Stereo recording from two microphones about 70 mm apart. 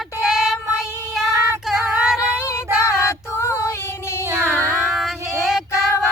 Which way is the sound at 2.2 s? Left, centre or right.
Right.